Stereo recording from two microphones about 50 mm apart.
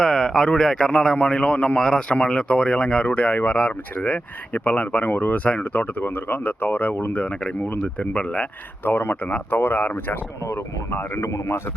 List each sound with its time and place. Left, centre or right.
0.0 s speech: centre
8.8 s speech: left
11.2 s speech: left